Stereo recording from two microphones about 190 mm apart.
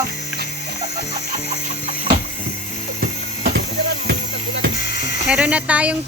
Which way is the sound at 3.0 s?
50° right (ahead or behind).